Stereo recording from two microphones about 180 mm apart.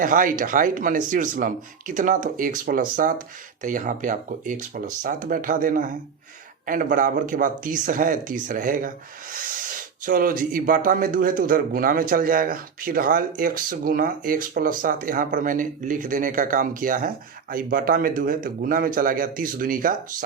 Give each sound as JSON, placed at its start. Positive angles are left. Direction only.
{"t": 0.0, "sound": "speech", "side_deg": -50}